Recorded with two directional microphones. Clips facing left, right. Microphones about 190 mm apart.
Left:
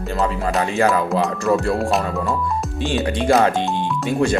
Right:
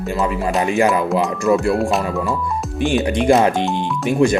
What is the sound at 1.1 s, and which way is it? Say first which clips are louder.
Speech: right 2 dB; centre (ahead or behind).